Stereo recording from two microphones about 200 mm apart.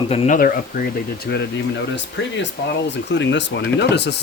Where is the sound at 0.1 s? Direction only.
30° left (ahead or behind).